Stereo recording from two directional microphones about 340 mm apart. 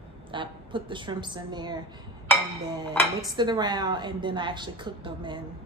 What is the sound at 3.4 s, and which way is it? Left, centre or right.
A woman's voice, centre.